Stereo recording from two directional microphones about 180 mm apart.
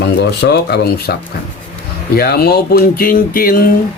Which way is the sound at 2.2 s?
60° left (ahead or behind).